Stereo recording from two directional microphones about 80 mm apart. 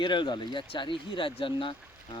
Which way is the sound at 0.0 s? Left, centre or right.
Left.